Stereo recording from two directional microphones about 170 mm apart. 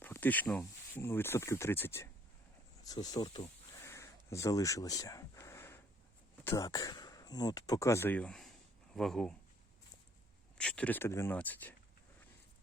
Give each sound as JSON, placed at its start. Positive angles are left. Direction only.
{"t": 0.0, "sound": "speech", "side_deg": 10}
{"t": 3.8, "sound": "a sound", "side_deg": 15}
{"t": 6.4, "sound": "speech", "side_deg": 15}
{"t": 10.6, "sound": "speech", "side_deg": 5}